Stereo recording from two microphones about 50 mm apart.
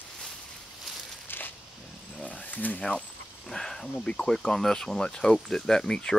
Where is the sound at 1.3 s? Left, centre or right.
Left.